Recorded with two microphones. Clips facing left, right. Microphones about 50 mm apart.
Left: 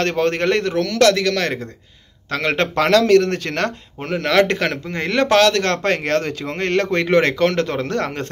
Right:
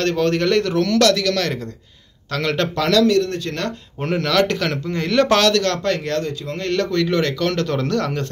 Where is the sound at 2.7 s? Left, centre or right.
Left.